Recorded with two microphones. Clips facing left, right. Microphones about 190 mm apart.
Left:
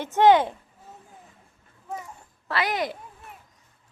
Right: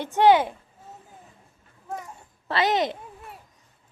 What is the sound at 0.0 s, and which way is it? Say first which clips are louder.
Speech: even; 15° right (ahead or behind).